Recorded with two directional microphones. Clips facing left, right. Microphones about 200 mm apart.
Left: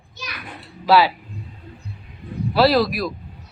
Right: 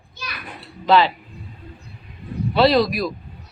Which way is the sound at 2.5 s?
5° left (ahead or behind).